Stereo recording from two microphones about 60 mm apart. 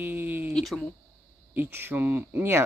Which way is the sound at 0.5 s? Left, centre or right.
Centre.